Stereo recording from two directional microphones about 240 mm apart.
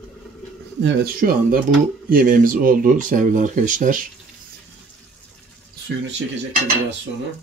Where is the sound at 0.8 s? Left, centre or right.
Right.